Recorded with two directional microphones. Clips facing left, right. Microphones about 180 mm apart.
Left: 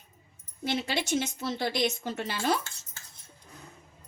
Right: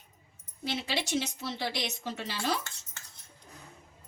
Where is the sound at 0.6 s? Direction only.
50° left (ahead or behind).